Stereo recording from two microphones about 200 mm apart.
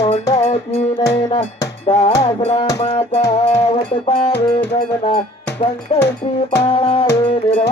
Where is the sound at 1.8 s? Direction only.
25° left (ahead or behind).